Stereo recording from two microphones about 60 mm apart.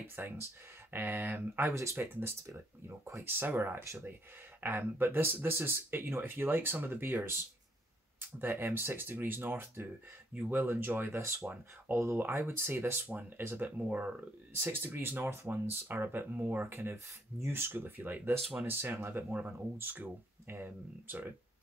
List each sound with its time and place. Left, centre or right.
0.0 s speech: right
1.6 s speech: right
14.5 s speech: right
19.8 s speech: right